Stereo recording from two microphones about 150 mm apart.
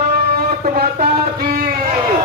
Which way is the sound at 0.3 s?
75° right (ahead or behind).